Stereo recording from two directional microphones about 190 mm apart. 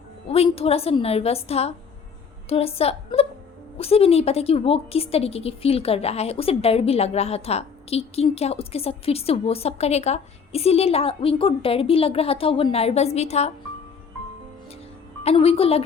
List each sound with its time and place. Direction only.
0.3 s a woman's voice: 30° left (ahead or behind)
15.2 s a woman's voice: 30° left (ahead or behind)